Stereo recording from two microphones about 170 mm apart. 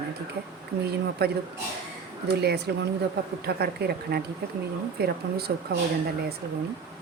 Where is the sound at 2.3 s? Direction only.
75° right (ahead or behind).